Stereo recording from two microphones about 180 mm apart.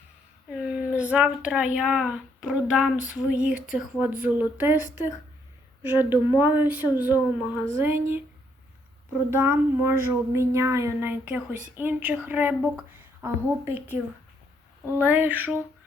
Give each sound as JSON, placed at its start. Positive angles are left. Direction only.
{"t": 0.5, "sound": "speech", "side_deg": -5}
{"t": 4.2, "sound": "child singing", "side_deg": -10}
{"t": 4.8, "sound": "speech", "side_deg": 45}
{"t": 5.8, "sound": "child singing", "side_deg": -10}
{"t": 9.3, "sound": "child singing", "side_deg": -15}
{"t": 15.0, "sound": "child singing", "side_deg": -10}